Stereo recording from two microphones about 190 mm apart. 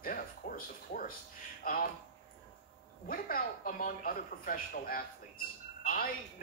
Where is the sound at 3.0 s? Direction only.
50° left (ahead or behind).